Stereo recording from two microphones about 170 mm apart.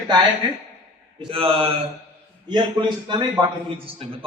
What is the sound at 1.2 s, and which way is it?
A man's voice, 30° right (ahead or behind).